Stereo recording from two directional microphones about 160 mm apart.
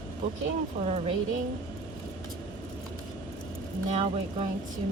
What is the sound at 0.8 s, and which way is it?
Speech, 55° right (ahead or behind).